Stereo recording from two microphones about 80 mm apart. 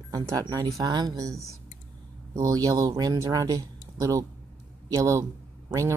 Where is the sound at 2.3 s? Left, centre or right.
Right.